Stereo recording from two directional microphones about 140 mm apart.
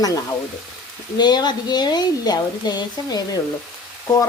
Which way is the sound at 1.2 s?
30° left (ahead or behind).